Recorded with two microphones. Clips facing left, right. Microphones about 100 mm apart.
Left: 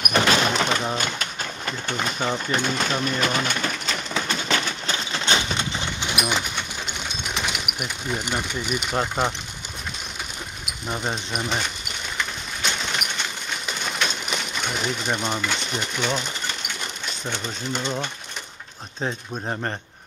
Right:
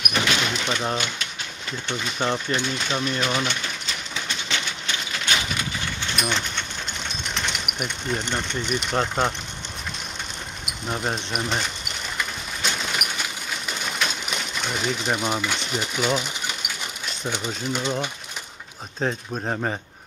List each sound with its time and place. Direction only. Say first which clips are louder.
0.1 s a sound: left 4 dB; 40° left (ahead or behind)
0.6 s a sound: left 4 dB; 55° left (ahead or behind)
0.9 s speech: left 1 dB; 45° left (ahead or behind)
2.5 s pigeon: left 2 dB; 45° left (ahead or behind); by 6.6 s 10° left (ahead or behind)
6.9 s speech: left 1 dB; 5° left (ahead or behind)
10.6 s speech: right 1 dB; centre (ahead or behind)
12.2 s a sound: left 1 dB; 5° right (ahead or behind)
14.5 s speech: right 2 dB; centre (ahead or behind)
18.9 s speech: right 2 dB; 5° right (ahead or behind)